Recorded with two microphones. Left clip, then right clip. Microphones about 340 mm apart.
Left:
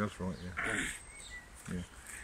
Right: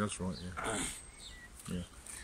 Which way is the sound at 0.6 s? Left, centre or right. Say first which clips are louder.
Left 3 dB; centre.